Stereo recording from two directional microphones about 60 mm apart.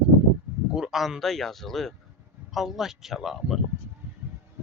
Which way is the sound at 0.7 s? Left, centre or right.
Centre.